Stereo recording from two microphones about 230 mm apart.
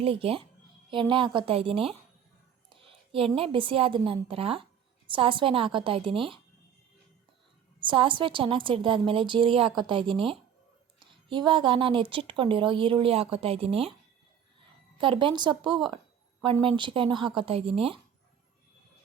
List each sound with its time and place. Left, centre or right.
0.0 s a woman's voice: right
7.8 s a woman's voice: right
14.9 s a woman's voice: right